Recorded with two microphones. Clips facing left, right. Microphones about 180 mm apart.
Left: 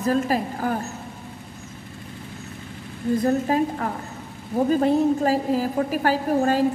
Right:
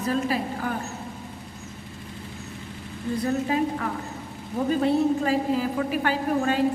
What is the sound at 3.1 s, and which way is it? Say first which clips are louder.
A woman's voice: left 4 dB; 45° left (ahead or behind).